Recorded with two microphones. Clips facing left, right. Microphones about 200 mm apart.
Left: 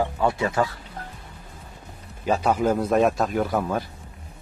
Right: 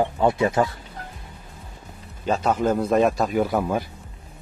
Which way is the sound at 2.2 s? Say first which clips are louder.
Even; 5° left (ahead or behind).